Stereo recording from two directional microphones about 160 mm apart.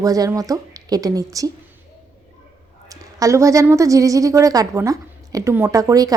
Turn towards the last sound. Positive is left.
turn(degrees=-20)  # may be behind; listen again after turning